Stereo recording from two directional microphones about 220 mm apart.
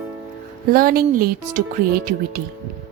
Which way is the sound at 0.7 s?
40° right (ahead or behind).